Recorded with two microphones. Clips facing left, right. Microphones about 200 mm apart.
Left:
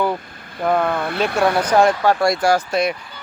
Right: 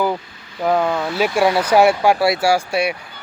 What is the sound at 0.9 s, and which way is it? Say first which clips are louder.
Speech: right 1 dB; 55° left (ahead or behind).